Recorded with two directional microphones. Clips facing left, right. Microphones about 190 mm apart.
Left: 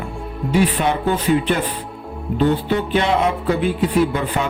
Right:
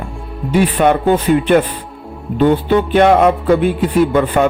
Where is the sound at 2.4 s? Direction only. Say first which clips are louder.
Right 6 dB; 55° right (ahead or behind).